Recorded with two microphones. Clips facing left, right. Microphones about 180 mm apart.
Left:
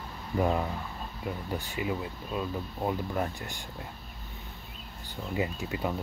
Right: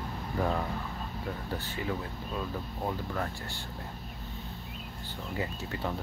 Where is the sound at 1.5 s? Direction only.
15° left (ahead or behind).